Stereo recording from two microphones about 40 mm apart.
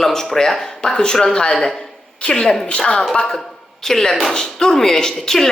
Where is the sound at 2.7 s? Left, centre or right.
Left.